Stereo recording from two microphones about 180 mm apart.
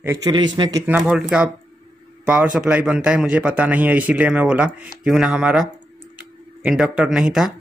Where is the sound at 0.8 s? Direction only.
5° right (ahead or behind).